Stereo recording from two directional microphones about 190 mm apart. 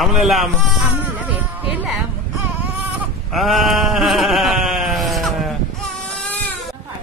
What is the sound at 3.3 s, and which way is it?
Sheep, centre (ahead or behind).